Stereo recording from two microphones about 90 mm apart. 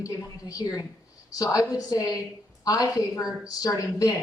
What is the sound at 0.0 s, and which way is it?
A woman's voice, 40° left (ahead or behind).